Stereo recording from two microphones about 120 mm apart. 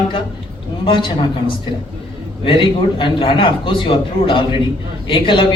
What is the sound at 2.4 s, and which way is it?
Speech, 45° left (ahead or behind).